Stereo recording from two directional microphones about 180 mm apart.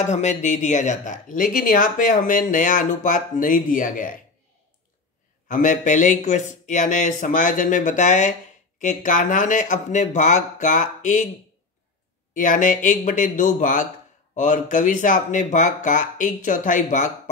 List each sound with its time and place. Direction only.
0.0 s speech: 40° left (ahead or behind)
5.5 s speech: 45° left (ahead or behind)
12.4 s speech: 45° left (ahead or behind)